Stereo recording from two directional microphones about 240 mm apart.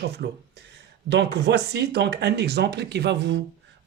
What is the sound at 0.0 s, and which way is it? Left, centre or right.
Speech, right.